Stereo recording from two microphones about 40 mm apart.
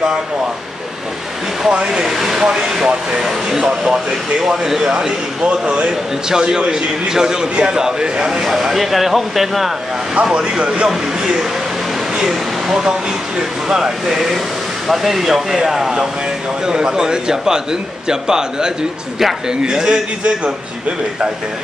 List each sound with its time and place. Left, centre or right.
1.7 s a man's voice: right
5.4 s a man's voice: right; by 9.7 s centre
10.2 s a man's voice: right
10.9 s a man's voice: centre